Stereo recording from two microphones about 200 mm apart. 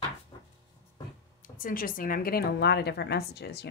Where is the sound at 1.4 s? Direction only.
45° left (ahead or behind).